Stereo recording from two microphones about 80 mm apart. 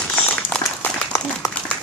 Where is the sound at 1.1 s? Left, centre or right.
Left.